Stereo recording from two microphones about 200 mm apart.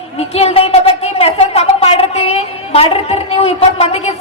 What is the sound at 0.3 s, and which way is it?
A woman's voice, 30° left (ahead or behind).